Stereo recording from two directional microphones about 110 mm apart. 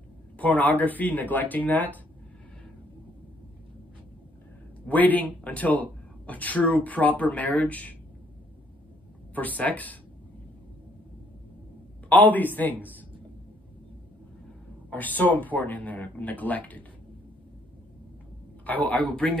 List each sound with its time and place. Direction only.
0.4 s a man's voice: 15° left (ahead or behind)
4.8 s a man's voice: 15° left (ahead or behind)
9.3 s a man's voice: 15° left (ahead or behind)
12.1 s a man's voice: 15° left (ahead or behind)
14.9 s a man's voice: 15° left (ahead or behind)
18.7 s a man's voice: 15° left (ahead or behind)